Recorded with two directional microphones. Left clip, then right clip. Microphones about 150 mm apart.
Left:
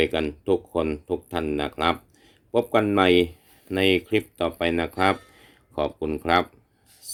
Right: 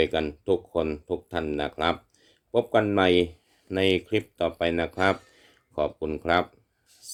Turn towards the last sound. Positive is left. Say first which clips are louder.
# left 2 dB
turn(degrees=10)  # may be behind; listen again after turning